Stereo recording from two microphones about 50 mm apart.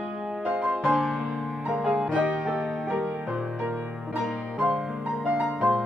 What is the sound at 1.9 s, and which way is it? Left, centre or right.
Music, centre.